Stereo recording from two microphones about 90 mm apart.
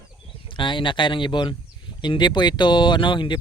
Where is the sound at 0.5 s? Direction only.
65° left (ahead or behind).